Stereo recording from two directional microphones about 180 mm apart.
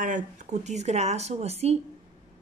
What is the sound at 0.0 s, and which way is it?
Speech, 45° right (ahead or behind).